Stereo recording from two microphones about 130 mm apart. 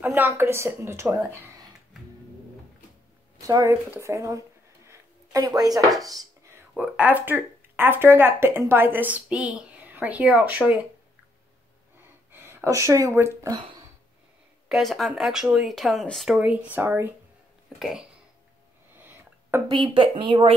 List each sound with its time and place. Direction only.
0.0 s a woman's voice: 15° right (ahead or behind)
3.4 s a woman's voice: 25° right (ahead or behind)
3.9 s a sound: 20° right (ahead or behind)
5.9 s dishes: 30° right (ahead or behind)
6.8 s speech: 15° right (ahead or behind)
12.3 s speech: 15° right (ahead or behind)
14.7 s speech: centre (ahead or behind)
16.3 s speech: 10° right (ahead or behind)
17.7 s speech: centre (ahead or behind)
18.9 s a sound: 15° right (ahead or behind)
19.7 s speech: 40° right (ahead or behind)